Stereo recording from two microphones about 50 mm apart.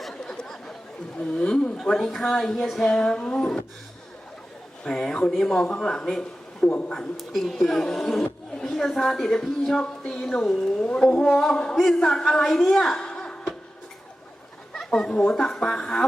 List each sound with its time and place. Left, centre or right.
0.1 s chatter: centre
1.4 s speech: centre
1.8 s gargling: centre
2.6 s a sound: centre
2.9 s gargling: centre
4.8 s gargling: centre
6.6 s a man's voice: left
7.2 s speech: centre
10.6 s gargling: centre
14.9 s gargling: centre